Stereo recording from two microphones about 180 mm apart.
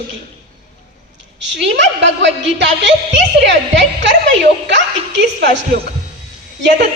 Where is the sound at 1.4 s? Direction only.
80° right.